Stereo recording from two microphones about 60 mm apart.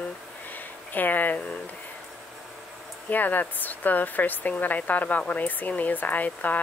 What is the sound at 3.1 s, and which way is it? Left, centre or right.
Speech, left.